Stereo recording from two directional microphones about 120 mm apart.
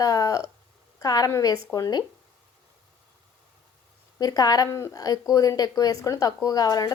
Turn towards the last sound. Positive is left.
turn(degrees=30)  # may be behind; listen again after turning